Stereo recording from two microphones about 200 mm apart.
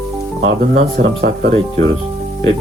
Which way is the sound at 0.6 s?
45° right (ahead or behind).